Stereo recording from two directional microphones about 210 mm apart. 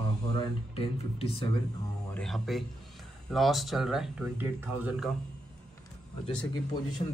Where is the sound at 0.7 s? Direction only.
25° left (ahead or behind).